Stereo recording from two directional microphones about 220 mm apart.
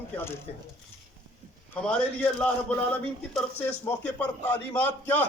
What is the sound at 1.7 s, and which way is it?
A man's voice, 5° left (ahead or behind).